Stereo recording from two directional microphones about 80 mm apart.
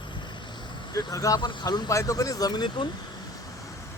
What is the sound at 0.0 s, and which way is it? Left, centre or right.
Vehicle, left.